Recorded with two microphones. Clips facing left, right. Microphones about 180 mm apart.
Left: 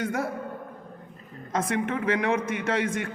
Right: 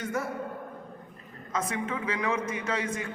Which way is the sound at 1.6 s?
70° left (ahead or behind).